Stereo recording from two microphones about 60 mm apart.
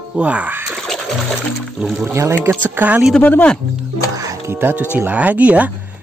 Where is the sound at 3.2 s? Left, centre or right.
Left.